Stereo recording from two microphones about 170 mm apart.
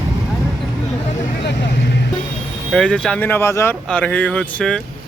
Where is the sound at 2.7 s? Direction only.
5° left (ahead or behind).